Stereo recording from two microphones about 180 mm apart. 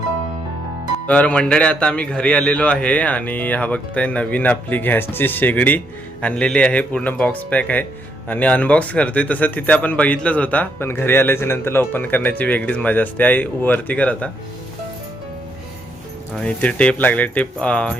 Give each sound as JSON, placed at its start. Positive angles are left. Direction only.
{"t": 1.0, "sound": "speech", "side_deg": 5}
{"t": 16.4, "sound": "speech", "side_deg": 5}